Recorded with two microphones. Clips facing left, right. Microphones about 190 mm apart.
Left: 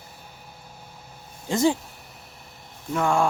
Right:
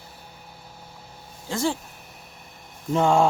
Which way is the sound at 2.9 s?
25° right (ahead or behind).